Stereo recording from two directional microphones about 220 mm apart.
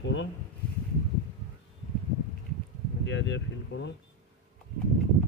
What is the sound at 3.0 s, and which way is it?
Speech, 55° left (ahead or behind).